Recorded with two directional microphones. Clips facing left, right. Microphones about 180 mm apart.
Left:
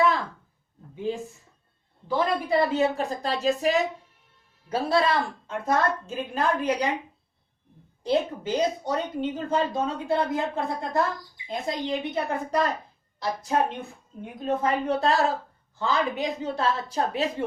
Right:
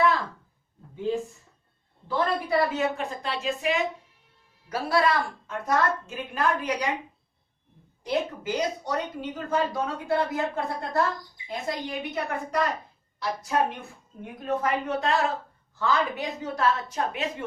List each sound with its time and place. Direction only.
2.0 s a woman's voice: 15° left (ahead or behind); by 3.8 s 40° left (ahead or behind)
4.7 s speech: 25° left (ahead or behind)
8.0 s speech: 30° left (ahead or behind)
15.8 s speech: 20° left (ahead or behind)
16.9 s a woman's voice: 35° left (ahead or behind)